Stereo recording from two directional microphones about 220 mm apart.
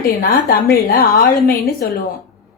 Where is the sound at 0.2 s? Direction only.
45° left (ahead or behind).